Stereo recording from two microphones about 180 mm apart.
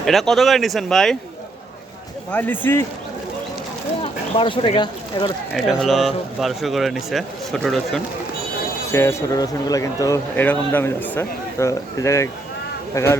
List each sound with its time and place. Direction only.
0.0 s a man's voice: centre (ahead or behind)
2.3 s a man's voice: 10° left (ahead or behind)
4.0 s speech: 30° left (ahead or behind)
5.8 s a man's voice: centre (ahead or behind)
8.9 s a man's voice: 15° left (ahead or behind)